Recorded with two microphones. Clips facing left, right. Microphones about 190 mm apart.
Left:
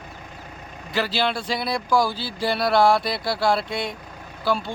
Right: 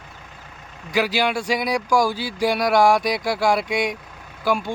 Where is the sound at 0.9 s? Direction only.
10° right (ahead or behind).